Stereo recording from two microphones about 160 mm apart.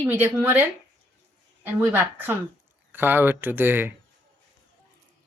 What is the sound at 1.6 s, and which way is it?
A woman's voice, 10° right (ahead or behind).